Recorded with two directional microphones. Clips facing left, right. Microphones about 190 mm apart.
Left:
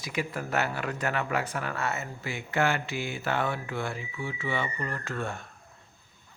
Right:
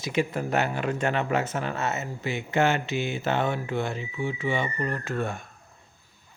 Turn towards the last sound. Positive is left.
turn(degrees=-15)  # may be behind; listen again after turning